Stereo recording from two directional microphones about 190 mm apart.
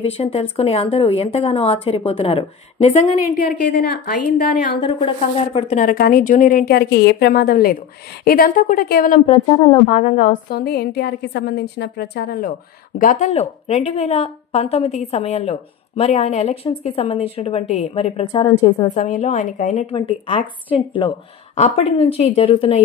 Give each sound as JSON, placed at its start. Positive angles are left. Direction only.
{"t": 0.0, "sound": "a woman's voice", "side_deg": 30}
{"t": 3.6, "sound": "a woman's voice", "side_deg": 60}
{"t": 4.7, "sound": "speech", "side_deg": 25}
{"t": 9.3, "sound": "a woman's voice", "side_deg": 20}
{"t": 9.8, "sound": "a woman's voice", "side_deg": 35}
{"t": 10.5, "sound": "a woman's voice", "side_deg": 55}
{"t": 13.0, "sound": "a woman's voice", "side_deg": 40}
{"t": 18.3, "sound": "a woman's voice", "side_deg": 20}
{"t": 18.9, "sound": "a woman's voice", "side_deg": 40}
{"t": 21.5, "sound": "a woman's voice", "side_deg": 35}